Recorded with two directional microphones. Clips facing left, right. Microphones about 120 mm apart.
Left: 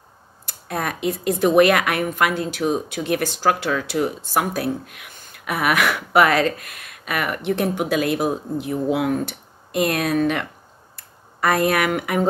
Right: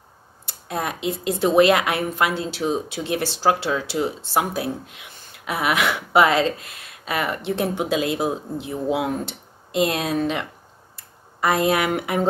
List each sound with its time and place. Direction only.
0.5 s speech: 20° right (ahead or behind)
11.4 s speech: 20° right (ahead or behind)